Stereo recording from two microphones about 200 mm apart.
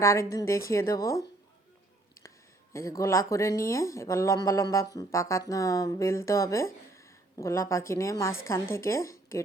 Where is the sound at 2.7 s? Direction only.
15° left (ahead or behind).